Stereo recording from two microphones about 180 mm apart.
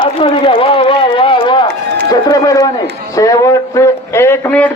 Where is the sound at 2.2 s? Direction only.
20° left (ahead or behind).